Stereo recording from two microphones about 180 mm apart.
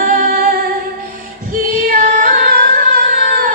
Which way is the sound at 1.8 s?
50° right (ahead or behind).